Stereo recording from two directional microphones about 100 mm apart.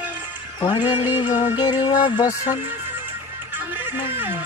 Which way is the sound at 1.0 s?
20° right (ahead or behind).